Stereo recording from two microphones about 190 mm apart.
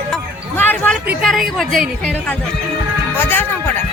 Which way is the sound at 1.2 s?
Centre (ahead or behind).